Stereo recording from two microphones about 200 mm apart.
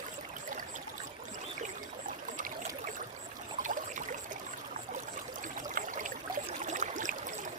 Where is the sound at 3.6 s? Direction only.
40° right (ahead or behind).